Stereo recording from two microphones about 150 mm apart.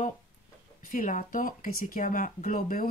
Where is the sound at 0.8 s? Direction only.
60° left (ahead or behind).